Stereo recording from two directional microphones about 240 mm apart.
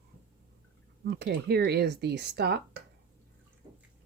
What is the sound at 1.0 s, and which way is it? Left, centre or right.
Speech, right.